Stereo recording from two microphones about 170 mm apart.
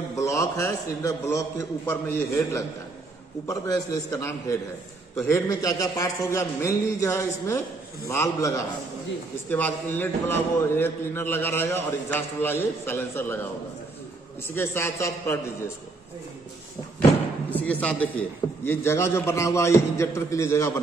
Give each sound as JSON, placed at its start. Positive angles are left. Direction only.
{"t": 0.1, "sound": "a man's voice", "side_deg": 20}
{"t": 14.5, "sound": "a man's voice", "side_deg": 15}
{"t": 17.5, "sound": "a man's voice", "side_deg": 10}